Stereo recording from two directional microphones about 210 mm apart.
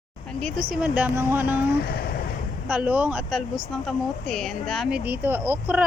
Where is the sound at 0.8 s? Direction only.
10° right (ahead or behind).